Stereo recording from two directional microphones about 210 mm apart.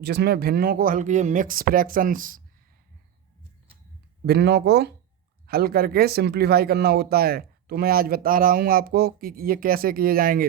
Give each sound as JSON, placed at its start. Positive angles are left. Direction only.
{"t": 0.0, "sound": "speech", "side_deg": -50}
{"t": 4.3, "sound": "speech", "side_deg": -50}